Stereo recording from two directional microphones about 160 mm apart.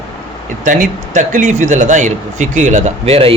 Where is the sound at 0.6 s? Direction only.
55° right (ahead or behind).